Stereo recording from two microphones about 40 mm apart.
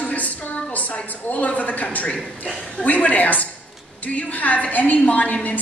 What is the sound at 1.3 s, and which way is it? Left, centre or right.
A woman's voice, left.